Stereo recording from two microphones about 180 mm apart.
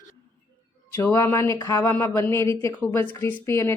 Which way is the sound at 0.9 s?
10° left (ahead or behind).